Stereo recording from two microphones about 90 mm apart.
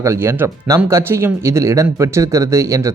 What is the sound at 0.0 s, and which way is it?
Speech, 30° right (ahead or behind).